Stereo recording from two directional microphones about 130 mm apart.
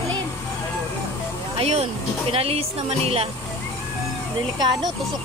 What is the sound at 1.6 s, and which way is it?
Speech, 50° right (ahead or behind).